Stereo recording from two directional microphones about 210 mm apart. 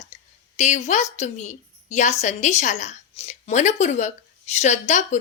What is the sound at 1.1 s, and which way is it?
A woman's voice, 35° left (ahead or behind).